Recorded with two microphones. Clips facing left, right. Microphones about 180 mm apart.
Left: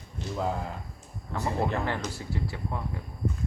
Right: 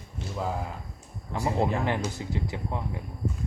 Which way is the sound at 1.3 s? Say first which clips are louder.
Right 2 dB; 15° right (ahead or behind).